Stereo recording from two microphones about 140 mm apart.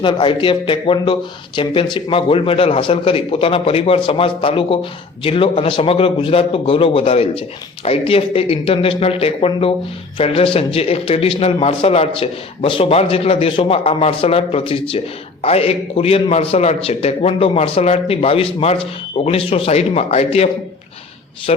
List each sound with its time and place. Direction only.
0.0 s a man's voice: 40° left (ahead or behind)